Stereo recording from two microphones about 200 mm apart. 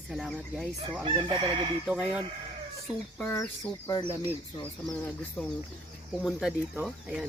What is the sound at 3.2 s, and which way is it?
Speech, 5° left (ahead or behind).